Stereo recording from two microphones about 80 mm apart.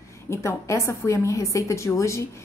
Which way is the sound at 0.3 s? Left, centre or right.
Left.